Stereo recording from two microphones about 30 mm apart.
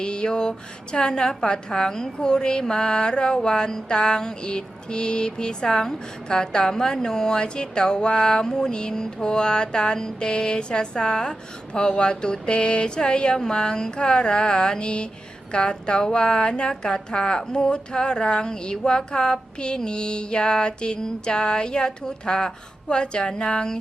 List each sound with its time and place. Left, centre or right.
0.0 s speech: left